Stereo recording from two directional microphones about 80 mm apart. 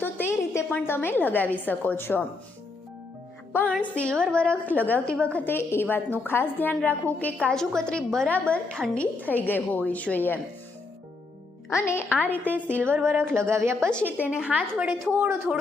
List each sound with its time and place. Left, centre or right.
0.0 s a woman's voice: left
3.8 s a woman's voice: centre
5.5 s a woman's voice: left
11.7 s speech: left
12.0 s a woman's voice: centre
12.3 s a woman's voice: centre
12.8 s a woman's voice: right
14.3 s a woman's voice: centre
15.1 s a woman's voice: right